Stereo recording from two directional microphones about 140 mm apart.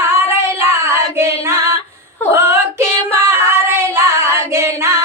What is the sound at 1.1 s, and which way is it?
Singing, 20° right (ahead or behind).